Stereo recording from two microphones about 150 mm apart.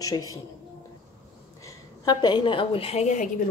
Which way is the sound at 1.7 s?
25° left (ahead or behind).